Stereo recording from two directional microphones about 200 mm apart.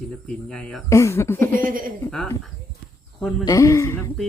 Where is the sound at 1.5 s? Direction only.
45° right (ahead or behind).